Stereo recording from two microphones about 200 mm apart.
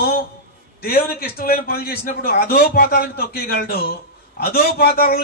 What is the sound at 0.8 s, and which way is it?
A man's voice, 50° left (ahead or behind).